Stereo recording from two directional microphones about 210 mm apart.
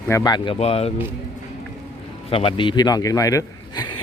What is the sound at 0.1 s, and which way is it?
Speech, 20° left (ahead or behind).